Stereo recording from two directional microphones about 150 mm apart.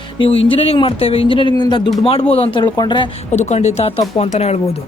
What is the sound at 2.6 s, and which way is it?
Speech, 30° left (ahead or behind).